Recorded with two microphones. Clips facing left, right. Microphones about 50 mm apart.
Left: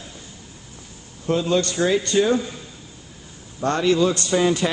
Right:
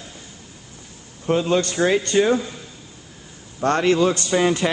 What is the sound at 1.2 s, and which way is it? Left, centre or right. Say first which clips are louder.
Speech: right 1 dB; right.